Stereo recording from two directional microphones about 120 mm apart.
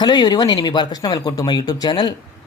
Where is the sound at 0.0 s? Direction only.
35° left (ahead or behind).